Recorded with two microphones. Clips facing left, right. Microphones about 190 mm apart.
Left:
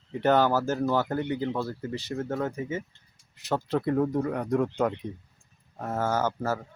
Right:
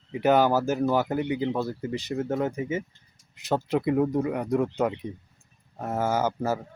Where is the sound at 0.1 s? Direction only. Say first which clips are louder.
Right 2 dB; 10° right (ahead or behind).